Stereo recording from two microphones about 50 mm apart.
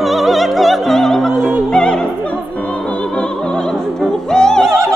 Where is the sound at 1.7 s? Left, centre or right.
Centre.